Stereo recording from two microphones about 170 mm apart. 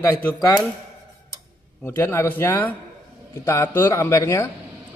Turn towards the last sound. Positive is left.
turn(degrees=20)  # may be behind; listen again after turning